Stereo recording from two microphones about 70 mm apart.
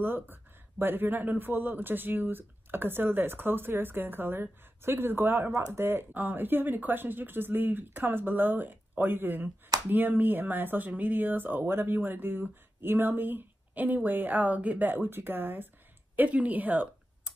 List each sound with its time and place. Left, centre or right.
0.0 s speech: right